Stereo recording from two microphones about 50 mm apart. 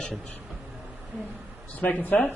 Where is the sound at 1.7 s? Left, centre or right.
Left.